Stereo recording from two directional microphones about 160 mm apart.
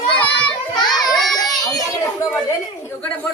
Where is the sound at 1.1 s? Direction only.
Centre (ahead or behind).